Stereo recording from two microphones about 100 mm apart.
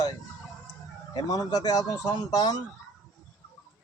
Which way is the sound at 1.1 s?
40° left (ahead or behind).